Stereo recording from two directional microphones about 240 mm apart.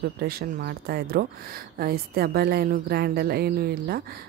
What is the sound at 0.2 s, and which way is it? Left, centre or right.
Speech, right.